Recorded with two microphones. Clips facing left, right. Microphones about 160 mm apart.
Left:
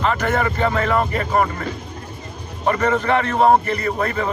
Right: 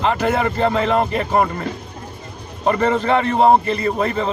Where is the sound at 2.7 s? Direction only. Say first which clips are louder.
Right 1 dB; 25° right (ahead or behind).